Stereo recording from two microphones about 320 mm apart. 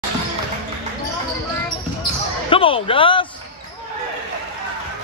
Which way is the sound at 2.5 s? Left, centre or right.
Centre.